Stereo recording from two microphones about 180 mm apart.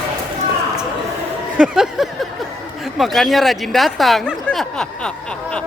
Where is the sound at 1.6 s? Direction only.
Centre (ahead or behind).